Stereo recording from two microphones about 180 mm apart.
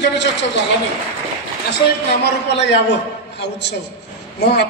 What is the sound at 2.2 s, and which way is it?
Speech, 70° left (ahead or behind).